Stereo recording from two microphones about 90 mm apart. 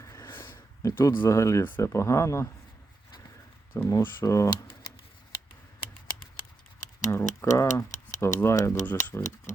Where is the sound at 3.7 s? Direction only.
35° left (ahead or behind).